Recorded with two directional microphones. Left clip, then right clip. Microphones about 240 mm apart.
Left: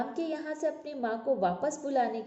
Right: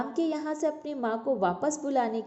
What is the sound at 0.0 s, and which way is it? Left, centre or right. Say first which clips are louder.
A woman's voice: right 4 dB; right.